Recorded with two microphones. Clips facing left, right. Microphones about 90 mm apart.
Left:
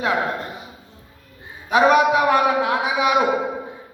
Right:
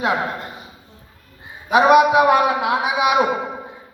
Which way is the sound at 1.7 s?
10° right (ahead or behind).